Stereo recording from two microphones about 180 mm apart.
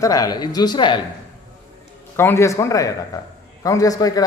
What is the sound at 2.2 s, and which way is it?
A man's voice, 15° left (ahead or behind).